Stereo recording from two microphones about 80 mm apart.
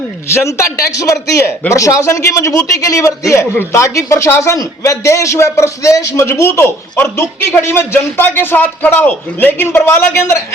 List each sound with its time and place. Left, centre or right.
0.3 s a man's voice: left